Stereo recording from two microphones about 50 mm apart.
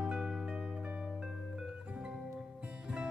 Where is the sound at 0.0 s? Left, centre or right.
Centre.